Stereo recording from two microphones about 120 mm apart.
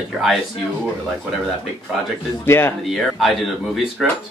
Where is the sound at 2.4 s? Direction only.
20° left (ahead or behind).